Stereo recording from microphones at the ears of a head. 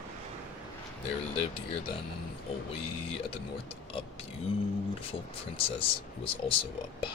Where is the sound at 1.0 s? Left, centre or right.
Left.